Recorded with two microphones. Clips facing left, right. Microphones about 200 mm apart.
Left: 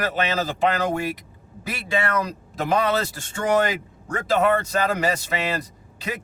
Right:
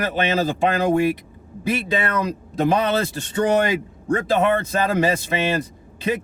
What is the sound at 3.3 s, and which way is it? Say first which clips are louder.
A man's voice: right 2 dB; 20° right (ahead or behind).